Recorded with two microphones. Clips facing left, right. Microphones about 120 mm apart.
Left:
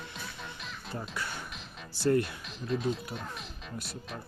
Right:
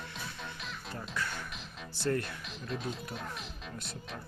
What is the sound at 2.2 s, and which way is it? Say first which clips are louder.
Speech: left 3 dB; centre (ahead or behind).